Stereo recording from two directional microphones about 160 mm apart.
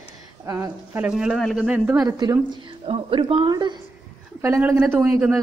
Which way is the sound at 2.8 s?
35° right (ahead or behind).